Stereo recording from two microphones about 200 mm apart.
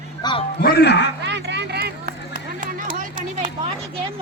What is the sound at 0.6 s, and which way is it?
Speech, 50° left (ahead or behind).